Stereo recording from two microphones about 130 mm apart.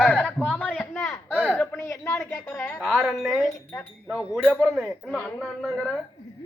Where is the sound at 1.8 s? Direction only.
20° left (ahead or behind).